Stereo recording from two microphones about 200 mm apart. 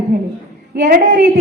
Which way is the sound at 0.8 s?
45° right (ahead or behind).